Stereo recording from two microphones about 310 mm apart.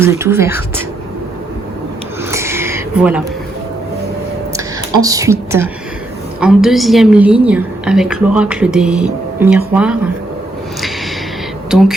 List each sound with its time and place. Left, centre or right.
0.0 s speech: centre
2.3 s a sound: centre
4.5 s speech: centre
11.7 s speech: centre